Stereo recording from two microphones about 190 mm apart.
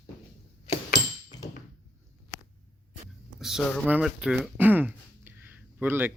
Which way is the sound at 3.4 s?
Centre (ahead or behind).